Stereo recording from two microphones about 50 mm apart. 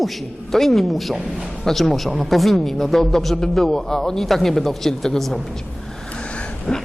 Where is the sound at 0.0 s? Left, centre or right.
Centre.